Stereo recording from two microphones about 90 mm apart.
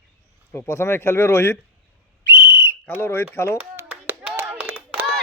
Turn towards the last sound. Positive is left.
turn(degrees=-15)  # may be behind; listen again after turning